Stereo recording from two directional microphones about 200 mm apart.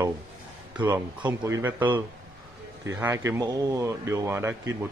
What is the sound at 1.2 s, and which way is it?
A man's voice, 10° right (ahead or behind).